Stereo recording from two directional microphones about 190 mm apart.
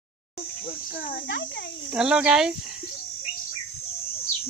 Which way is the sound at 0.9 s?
50° left (ahead or behind).